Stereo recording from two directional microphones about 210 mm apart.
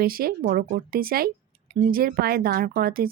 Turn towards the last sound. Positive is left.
turn(degrees=-45)  # may be behind; listen again after turning